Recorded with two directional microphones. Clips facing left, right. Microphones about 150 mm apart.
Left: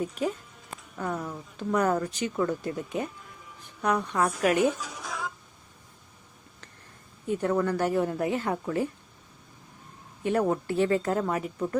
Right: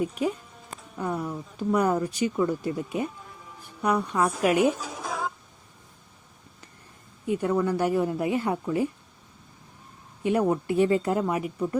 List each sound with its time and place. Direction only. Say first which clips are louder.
0.0 s speech: right 3 dB; 10° right (ahead or behind)
4.8 s music: right 4 dB; 45° right (ahead or behind)
7.3 s speech: right 1 dB; 10° right (ahead or behind)
10.2 s speech: right 2 dB; 10° right (ahead or behind)